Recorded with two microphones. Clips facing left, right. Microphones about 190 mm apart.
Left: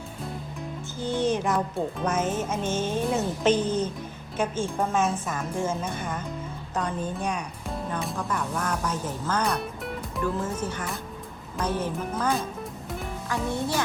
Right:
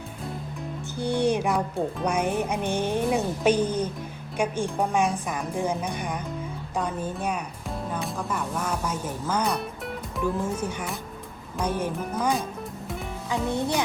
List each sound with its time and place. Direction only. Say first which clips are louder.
0.9 s music: right 2 dB; 15° right (ahead or behind)
6.7 s speech: even; 10° right (ahead or behind)
10.2 s music: right 2 dB; 10° right (ahead or behind)
13.5 s speech: right 2 dB; 20° right (ahead or behind)